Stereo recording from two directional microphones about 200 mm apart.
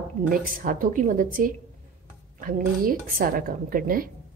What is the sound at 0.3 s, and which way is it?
Speech, 45° right (ahead or behind).